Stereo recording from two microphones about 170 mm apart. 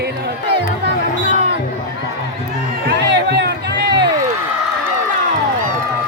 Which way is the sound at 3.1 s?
85° right.